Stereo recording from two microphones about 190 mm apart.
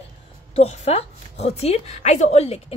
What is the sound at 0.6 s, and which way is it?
A woman's voice, 35° left (ahead or behind).